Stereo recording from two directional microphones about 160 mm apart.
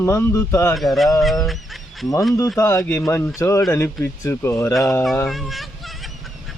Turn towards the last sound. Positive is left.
turn(degrees=0)  # may be behind; listen again after turning